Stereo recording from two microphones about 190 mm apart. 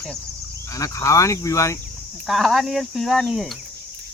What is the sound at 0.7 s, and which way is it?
Speech, 15° left (ahead or behind).